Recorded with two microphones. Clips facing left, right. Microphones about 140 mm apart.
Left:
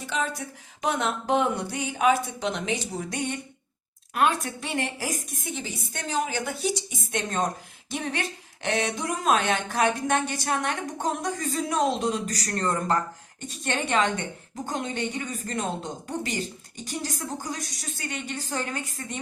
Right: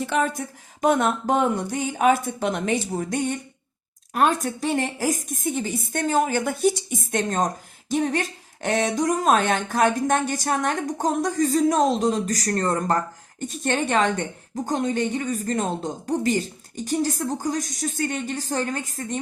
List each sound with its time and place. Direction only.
0.0 s a woman's voice: 55° right (ahead or behind)